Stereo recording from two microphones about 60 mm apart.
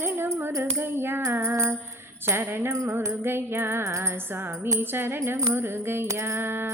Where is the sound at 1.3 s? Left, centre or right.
Right.